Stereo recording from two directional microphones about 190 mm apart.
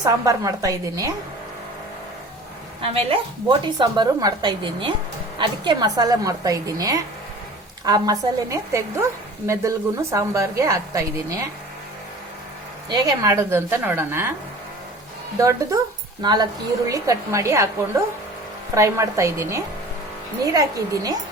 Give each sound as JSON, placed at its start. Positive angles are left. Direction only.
{"t": 0.0, "sound": "a woman's voice", "side_deg": -15}
{"t": 2.9, "sound": "a woman's voice", "side_deg": -30}
{"t": 12.9, "sound": "a woman's voice", "side_deg": -15}
{"t": 15.4, "sound": "a woman's voice", "side_deg": -15}
{"t": 18.7, "sound": "a woman's voice", "side_deg": -15}